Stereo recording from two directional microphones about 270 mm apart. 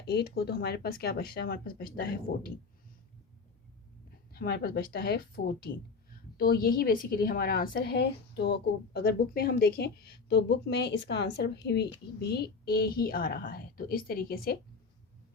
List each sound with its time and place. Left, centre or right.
0.1 s a woman's voice: left
4.4 s a woman's voice: left